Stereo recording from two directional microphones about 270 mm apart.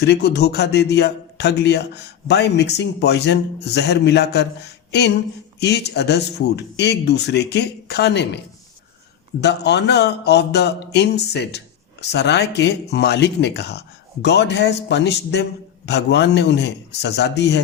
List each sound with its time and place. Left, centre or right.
0.0 s speech: left
9.4 s speech: left